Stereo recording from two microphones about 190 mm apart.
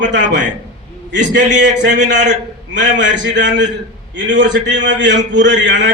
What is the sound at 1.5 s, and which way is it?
A man's voice, 70° right (ahead or behind).